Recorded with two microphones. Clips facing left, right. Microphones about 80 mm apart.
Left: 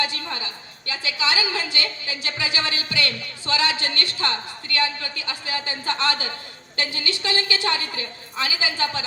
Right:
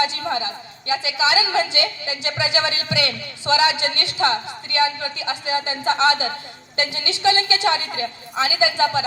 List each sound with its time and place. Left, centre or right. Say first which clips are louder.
0.0 s a woman's voice: right 6 dB; right